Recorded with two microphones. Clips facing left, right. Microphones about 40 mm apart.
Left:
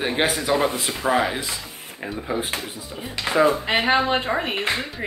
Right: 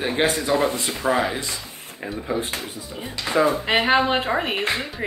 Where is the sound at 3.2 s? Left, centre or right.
Centre.